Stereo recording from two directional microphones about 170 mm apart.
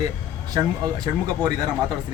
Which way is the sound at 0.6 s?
20° right (ahead or behind).